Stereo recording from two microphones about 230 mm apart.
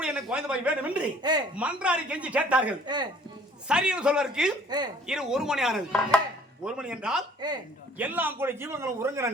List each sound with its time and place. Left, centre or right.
0.0 s speech: centre
1.2 s a man's voice: centre
1.5 s speech: centre
2.8 s speech: centre
3.7 s speech: centre
7.4 s a man's voice: centre
7.9 s a man's voice: centre